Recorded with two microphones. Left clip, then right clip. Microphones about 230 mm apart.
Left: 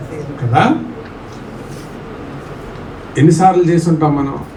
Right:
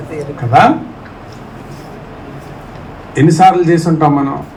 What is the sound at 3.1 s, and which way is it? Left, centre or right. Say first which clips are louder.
Speech: right 2 dB; right.